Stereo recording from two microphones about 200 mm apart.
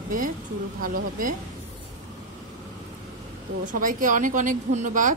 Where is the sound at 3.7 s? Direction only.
40° right (ahead or behind).